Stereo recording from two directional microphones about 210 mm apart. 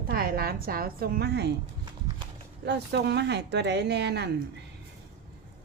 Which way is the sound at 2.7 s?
55° right (ahead or behind).